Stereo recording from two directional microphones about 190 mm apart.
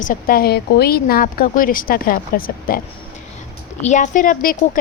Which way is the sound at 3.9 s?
40° left (ahead or behind).